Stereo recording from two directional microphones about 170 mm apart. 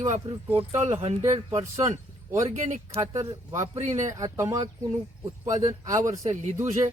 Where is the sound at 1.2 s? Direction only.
20° right (ahead or behind).